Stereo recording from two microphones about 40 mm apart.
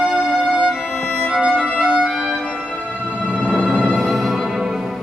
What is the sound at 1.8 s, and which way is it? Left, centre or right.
Music, centre.